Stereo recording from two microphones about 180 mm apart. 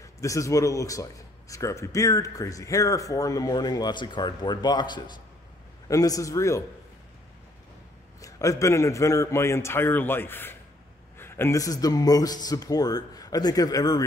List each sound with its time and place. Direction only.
0.0 s a man's voice: 15° left (ahead or behind)
8.2 s a man's voice: 20° left (ahead or behind)